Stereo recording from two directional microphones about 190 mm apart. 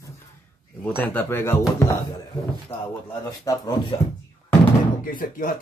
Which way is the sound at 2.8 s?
20° left (ahead or behind).